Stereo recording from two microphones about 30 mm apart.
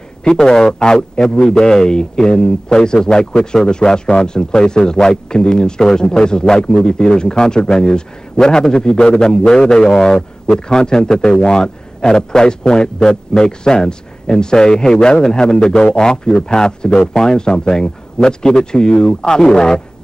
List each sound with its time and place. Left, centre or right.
0.3 s a man's voice: left